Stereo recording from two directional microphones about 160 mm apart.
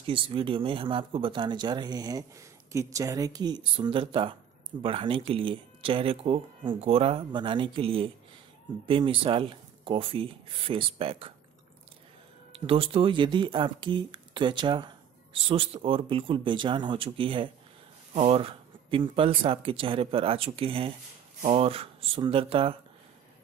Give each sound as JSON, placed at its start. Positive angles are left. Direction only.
{"t": 0.0, "sound": "speech", "side_deg": -35}
{"t": 12.5, "sound": "speech", "side_deg": -35}